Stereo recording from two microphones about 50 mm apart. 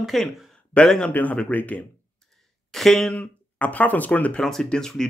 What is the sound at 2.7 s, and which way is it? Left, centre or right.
Speech, centre.